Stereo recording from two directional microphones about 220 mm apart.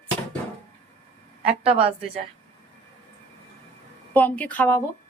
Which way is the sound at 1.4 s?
25° right (ahead or behind).